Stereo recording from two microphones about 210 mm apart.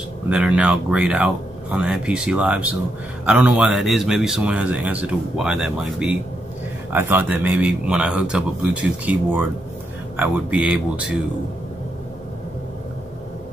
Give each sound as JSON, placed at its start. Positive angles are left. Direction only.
{"t": 0.3, "sound": "speech", "side_deg": -5}